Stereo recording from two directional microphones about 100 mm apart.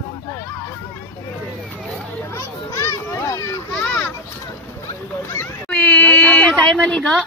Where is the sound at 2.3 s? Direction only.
30° left (ahead or behind).